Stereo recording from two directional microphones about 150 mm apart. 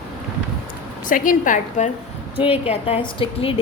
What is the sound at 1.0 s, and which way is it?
Speech, 65° left (ahead or behind).